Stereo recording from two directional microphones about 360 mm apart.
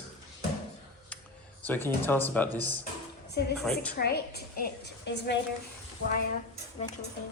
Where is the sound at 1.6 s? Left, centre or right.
Centre.